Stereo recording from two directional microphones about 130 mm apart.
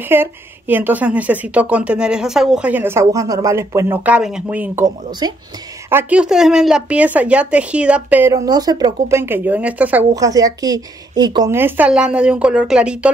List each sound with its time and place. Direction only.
0.0 s speech: 15° right (ahead or behind)
5.2 s speech: 35° right (ahead or behind)
5.9 s speech: 15° right (ahead or behind)
8.3 s a woman's voice: 25° right (ahead or behind)
9.2 s speech: 15° right (ahead or behind)
10.1 s a woman's voice: 25° right (ahead or behind)
11.5 s speech: 15° right (ahead or behind)